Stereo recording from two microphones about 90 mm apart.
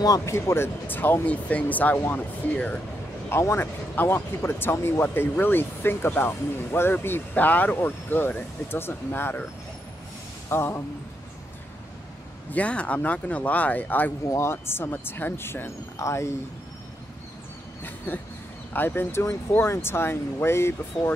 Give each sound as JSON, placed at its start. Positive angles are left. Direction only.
{"t": 0.0, "sound": "speech", "side_deg": 40}
{"t": 3.3, "sound": "speech", "side_deg": 30}
{"t": 10.5, "sound": "speech", "side_deg": 25}
{"t": 12.5, "sound": "speech", "side_deg": 15}
{"t": 17.8, "sound": "speech", "side_deg": 20}